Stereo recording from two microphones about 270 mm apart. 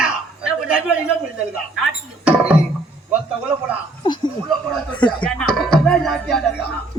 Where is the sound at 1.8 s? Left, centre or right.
Centre.